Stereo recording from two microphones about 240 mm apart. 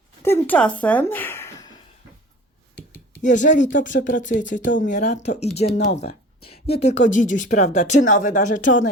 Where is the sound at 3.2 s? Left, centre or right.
Left.